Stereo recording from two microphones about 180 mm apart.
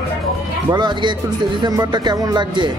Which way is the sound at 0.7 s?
25° right (ahead or behind).